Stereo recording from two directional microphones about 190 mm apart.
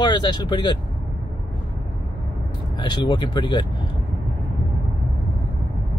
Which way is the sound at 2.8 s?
25° left (ahead or behind).